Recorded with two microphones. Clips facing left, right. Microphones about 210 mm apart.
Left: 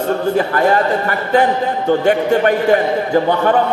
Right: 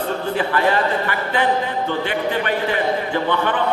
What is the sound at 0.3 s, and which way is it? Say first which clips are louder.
A man's voice: left 3 dB; 45° left (ahead or behind).